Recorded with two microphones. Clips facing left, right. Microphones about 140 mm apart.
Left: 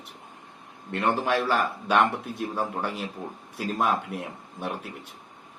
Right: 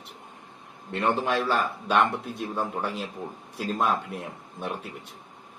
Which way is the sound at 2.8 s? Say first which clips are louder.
Even; 60° left (ahead or behind).